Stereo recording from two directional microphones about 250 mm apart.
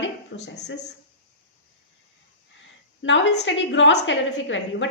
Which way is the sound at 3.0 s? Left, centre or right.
Left.